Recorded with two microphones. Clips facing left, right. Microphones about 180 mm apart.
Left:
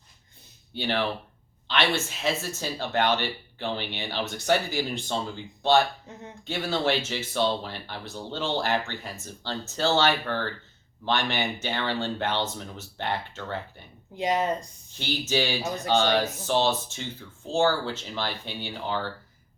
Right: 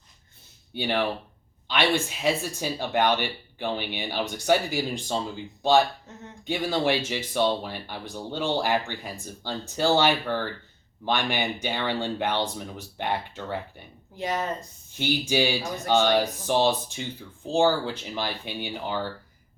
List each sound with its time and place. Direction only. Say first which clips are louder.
0.7 s speech: right 1 dB; 10° right (ahead or behind)
6.4 s speech: right 2 dB; 15° right (ahead or behind)
14.2 s speech: left 3 dB; 15° left (ahead or behind)
14.9 s speech: right 3 dB; 15° right (ahead or behind)